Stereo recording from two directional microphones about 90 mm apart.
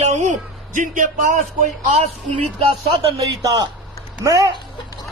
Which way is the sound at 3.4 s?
40° right (ahead or behind).